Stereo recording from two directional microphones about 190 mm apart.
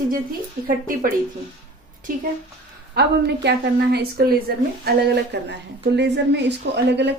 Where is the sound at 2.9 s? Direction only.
60° right (ahead or behind).